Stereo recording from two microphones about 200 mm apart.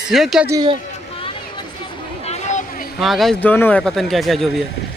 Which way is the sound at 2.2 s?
35° left (ahead or behind).